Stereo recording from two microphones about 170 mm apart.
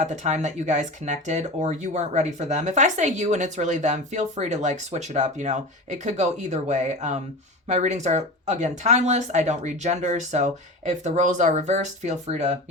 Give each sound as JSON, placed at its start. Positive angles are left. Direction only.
{"t": 0.0, "sound": "speech", "side_deg": -40}